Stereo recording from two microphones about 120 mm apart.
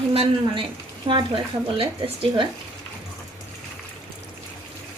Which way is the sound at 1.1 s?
45° right (ahead or behind).